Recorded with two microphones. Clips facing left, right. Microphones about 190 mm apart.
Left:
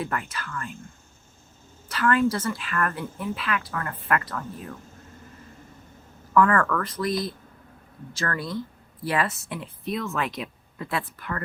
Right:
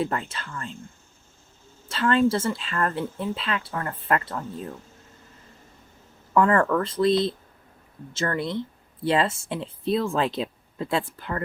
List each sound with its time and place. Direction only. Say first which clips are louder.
0.0 s speech: right 3 dB; 25° right (ahead or behind)
1.9 s speech: right 2 dB; 25° right (ahead or behind)
6.3 s speech: right 1 dB; 25° right (ahead or behind)